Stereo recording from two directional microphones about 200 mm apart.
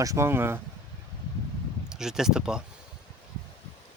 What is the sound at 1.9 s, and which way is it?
Speech, 5° right (ahead or behind).